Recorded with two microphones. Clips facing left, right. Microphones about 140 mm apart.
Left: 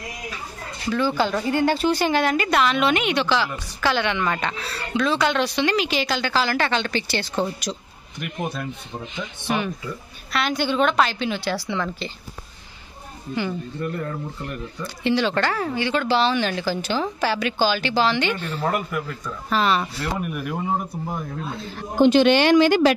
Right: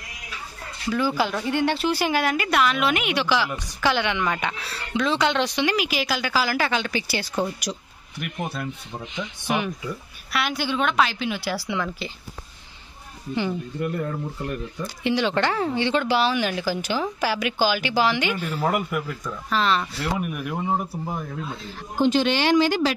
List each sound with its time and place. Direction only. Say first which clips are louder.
0.8 s speech: left 1 dB; 10° right (ahead or behind)
7.7 s a woman's voice: left 1 dB; 5° left (ahead or behind)
9.0 s speech: even; 15° right (ahead or behind)
10.3 s a woman's voice: left 3 dB; 5° right (ahead or behind)
13.3 s speech: right 1 dB; 15° right (ahead or behind)
16.2 s speech: left 1 dB; 10° right (ahead or behind)
19.5 s a woman's voice: left 2 dB; 5° left (ahead or behind)
21.9 s speech: left 5 dB; 65° left (ahead or behind)